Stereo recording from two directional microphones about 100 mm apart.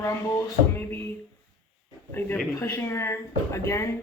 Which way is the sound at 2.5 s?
25° left (ahead or behind).